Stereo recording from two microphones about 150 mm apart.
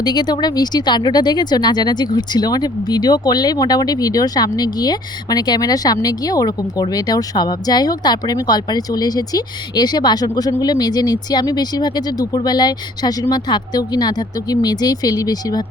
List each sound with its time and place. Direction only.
0.0 s speech: 30° left (ahead or behind)